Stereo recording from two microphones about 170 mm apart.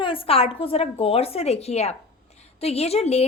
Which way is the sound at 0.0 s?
30° left (ahead or behind).